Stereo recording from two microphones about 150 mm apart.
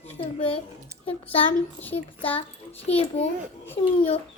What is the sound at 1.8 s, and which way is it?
Speech, 10° left (ahead or behind).